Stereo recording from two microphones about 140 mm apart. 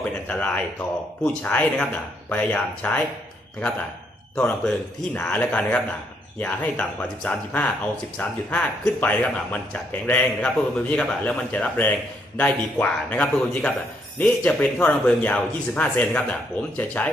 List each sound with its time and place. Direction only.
0.3 s speech: 10° left (ahead or behind)
4.4 s speech: 5° left (ahead or behind)